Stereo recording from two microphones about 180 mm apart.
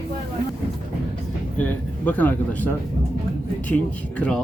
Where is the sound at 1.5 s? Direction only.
10° left (ahead or behind).